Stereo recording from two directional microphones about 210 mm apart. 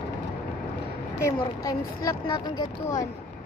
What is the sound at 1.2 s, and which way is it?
Speech, 15° left (ahead or behind).